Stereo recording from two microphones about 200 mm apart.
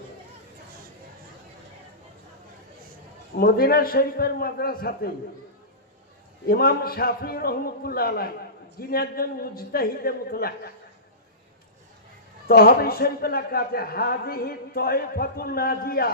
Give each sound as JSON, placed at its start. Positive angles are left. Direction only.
{"t": 3.3, "sound": "a man's voice", "side_deg": 50}
{"t": 6.5, "sound": "a man's voice", "side_deg": 50}
{"t": 12.5, "sound": "a man's voice", "side_deg": 50}